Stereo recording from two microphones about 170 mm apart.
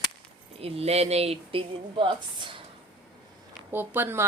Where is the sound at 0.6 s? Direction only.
35° right (ahead or behind).